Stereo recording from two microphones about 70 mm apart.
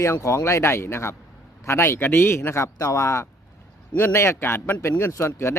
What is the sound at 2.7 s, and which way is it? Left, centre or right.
A man's voice, left.